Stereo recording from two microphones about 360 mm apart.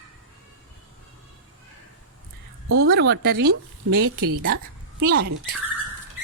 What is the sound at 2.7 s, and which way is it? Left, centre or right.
A woman's voice, right.